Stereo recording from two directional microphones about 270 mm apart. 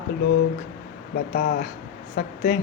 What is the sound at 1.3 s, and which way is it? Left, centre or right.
Speech, left.